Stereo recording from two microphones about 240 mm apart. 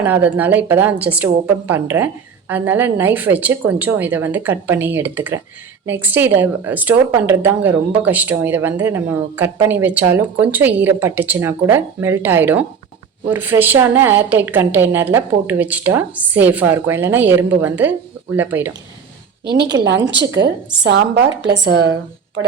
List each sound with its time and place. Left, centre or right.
0.0 s a woman's voice: centre
19.5 s a woman's voice: right